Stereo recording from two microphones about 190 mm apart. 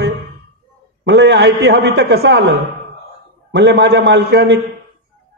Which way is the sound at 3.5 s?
65° right (ahead or behind).